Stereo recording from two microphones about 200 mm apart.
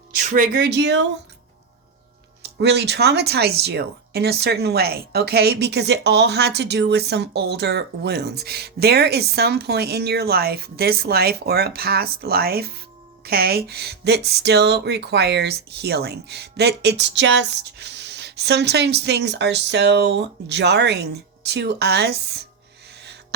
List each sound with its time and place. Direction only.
0.1 s speech: 40° right (ahead or behind)
0.6 s speech: 60° right (ahead or behind)
2.4 s speech: 55° right (ahead or behind)